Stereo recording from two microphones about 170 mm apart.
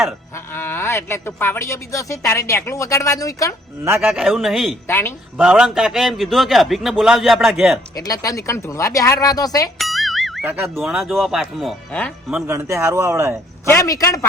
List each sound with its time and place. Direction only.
0.5 s a woman's voice: 10° left (ahead or behind)
3.8 s speech: 10° right (ahead or behind)
4.2 s a man's voice: centre (ahead or behind)
4.9 s a woman's voice: 10° left (ahead or behind)
5.4 s a man's voice: 5° right (ahead or behind)
7.9 s speech: 20° left (ahead or behind)
9.7 s speech: centre (ahead or behind)
12.3 s speech: 15° right (ahead or behind)
13.7 s a woman's voice: 20° left (ahead or behind)